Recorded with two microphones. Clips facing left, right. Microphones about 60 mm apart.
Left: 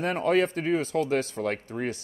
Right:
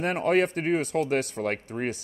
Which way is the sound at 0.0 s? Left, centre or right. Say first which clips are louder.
Even; right.